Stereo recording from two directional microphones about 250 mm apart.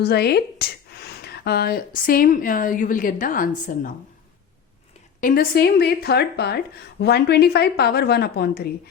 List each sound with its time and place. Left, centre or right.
0.0 s speech: left
5.2 s speech: left